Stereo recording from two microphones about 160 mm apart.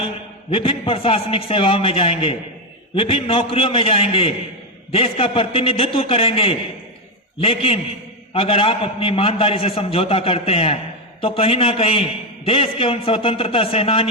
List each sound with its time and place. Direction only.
0.5 s a man's voice: 35° left (ahead or behind)